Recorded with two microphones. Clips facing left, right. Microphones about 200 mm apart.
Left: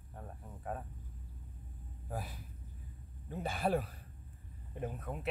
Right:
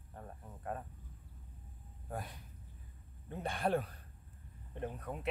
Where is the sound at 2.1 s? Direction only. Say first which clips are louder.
Left 1 dB; 5° left (ahead or behind).